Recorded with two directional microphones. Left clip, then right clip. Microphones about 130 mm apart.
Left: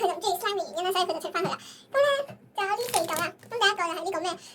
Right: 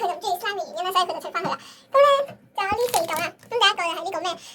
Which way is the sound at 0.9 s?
Centre (ahead or behind).